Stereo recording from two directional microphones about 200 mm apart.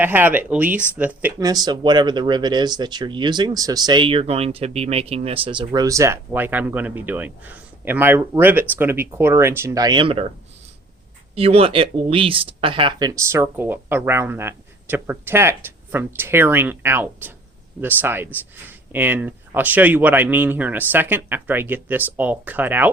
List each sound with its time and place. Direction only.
0.0 s speech: 10° right (ahead or behind)
1.4 s speech: 20° right (ahead or behind)
11.3 s speech: 30° right (ahead or behind); by 22.9 s 10° right (ahead or behind)